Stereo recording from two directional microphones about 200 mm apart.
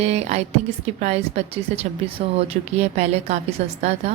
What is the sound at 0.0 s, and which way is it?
Speech, 30° right (ahead or behind).